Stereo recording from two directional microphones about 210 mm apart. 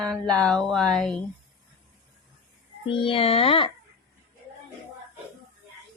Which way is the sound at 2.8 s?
25° left (ahead or behind).